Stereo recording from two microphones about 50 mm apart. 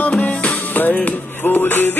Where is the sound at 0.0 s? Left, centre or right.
Left.